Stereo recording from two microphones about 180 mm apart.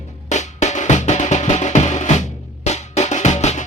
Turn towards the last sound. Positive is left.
turn(degrees=40)  # may be behind; listen again after turning